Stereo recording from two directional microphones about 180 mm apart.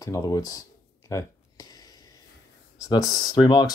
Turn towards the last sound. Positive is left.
turn(degrees=20)  # may be behind; listen again after turning